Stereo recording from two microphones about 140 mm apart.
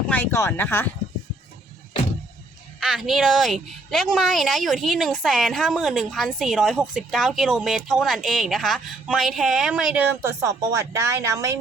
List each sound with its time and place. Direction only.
0.1 s speech: 15° left (ahead or behind)
2.8 s a woman's voice: centre (ahead or behind)
10.4 s speech: 20° right (ahead or behind)